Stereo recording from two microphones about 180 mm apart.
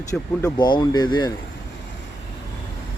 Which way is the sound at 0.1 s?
20° left (ahead or behind).